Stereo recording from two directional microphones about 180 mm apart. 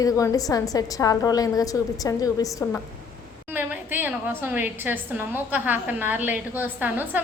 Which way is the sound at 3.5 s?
10° right (ahead or behind).